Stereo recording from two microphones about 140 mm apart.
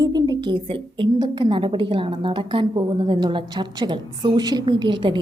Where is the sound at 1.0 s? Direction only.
35° right (ahead or behind).